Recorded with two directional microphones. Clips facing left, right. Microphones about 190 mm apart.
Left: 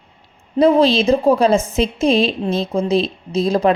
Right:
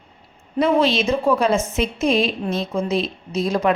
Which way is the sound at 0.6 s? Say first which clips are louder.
Left 5 dB; 35° left (ahead or behind).